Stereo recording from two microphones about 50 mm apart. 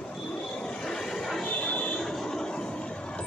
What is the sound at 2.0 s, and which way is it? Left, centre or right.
Train, centre.